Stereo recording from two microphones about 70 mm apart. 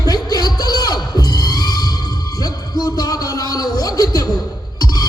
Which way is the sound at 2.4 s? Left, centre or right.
Left.